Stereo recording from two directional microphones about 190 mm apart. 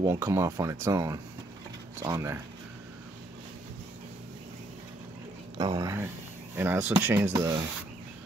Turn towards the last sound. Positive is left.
turn(degrees=-20)  # may be behind; listen again after turning